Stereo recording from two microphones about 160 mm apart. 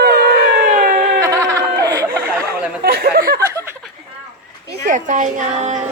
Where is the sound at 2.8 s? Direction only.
75° right (ahead or behind).